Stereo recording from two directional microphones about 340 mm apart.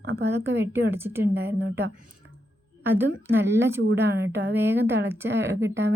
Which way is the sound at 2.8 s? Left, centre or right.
Centre.